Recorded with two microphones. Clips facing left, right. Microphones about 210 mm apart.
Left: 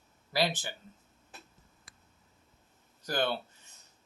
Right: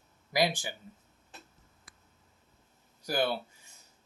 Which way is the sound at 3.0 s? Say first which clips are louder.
Right 1 dB; 10° right (ahead or behind).